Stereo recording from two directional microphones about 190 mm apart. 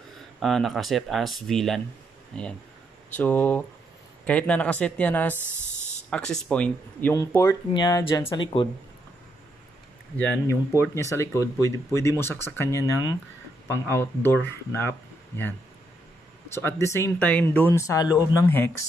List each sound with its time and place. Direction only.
0.4 s speech: centre (ahead or behind)
5.6 s a sound: 40° left (ahead or behind)
6.0 s speech: 5° left (ahead or behind); by 8.6 s 25° left (ahead or behind)
10.1 s speech: 5° left (ahead or behind)
16.5 s speech: 15° left (ahead or behind)